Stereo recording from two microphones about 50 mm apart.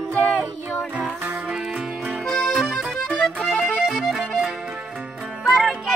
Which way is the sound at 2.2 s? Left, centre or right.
Centre.